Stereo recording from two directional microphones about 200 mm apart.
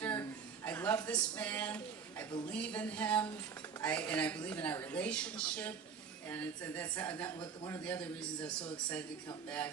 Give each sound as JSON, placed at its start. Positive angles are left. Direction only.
{"t": 0.0, "sound": "a sound", "side_deg": 10}
{"t": 2.5, "sound": "a woman's voice", "side_deg": 5}
{"t": 7.3, "sound": "a man's voice", "side_deg": 20}
{"t": 7.9, "sound": "a woman's voice", "side_deg": 5}